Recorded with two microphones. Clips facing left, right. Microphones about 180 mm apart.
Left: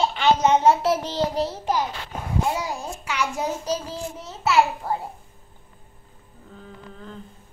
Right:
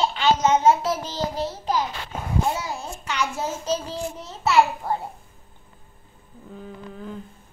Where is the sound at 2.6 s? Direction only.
10° left (ahead or behind).